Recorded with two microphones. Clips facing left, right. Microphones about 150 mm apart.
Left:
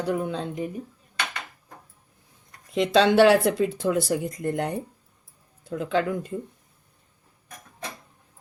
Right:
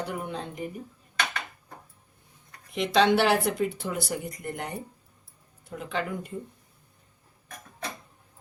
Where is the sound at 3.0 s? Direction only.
90° left.